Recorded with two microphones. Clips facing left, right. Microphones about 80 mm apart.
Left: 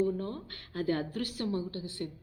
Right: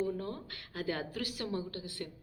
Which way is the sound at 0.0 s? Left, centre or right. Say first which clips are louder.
Left 4 dB; left.